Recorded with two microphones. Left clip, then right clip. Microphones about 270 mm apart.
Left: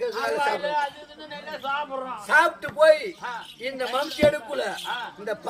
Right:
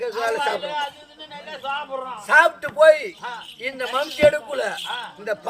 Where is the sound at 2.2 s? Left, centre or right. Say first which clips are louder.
Right 4 dB; centre.